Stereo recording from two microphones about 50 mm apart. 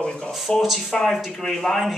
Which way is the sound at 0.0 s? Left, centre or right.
Centre.